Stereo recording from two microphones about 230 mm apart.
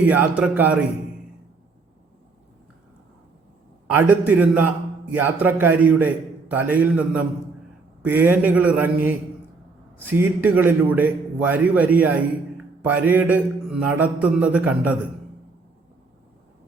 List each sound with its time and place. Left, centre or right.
0.0 s a man's voice: centre
3.9 s a man's voice: centre